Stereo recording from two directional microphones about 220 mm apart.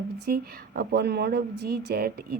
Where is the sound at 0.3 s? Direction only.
45° right (ahead or behind).